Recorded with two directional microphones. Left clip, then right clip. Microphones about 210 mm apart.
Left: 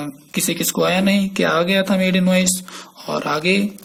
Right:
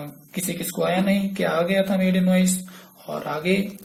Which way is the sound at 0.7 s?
40° left (ahead or behind).